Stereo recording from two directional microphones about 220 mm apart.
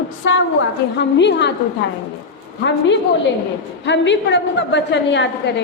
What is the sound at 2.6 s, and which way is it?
A woman's voice, 55° left (ahead or behind).